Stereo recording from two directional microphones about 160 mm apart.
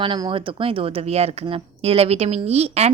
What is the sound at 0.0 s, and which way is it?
A woman's voice, 30° right (ahead or behind).